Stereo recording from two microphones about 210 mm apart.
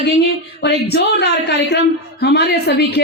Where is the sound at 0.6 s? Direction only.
50° left (ahead or behind).